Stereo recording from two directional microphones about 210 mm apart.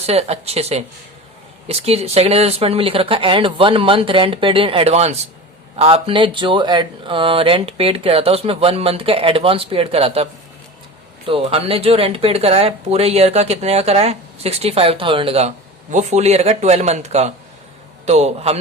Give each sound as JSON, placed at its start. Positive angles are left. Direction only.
{"t": 0.0, "sound": "speech", "side_deg": -30}
{"t": 11.3, "sound": "a man's voice", "side_deg": -25}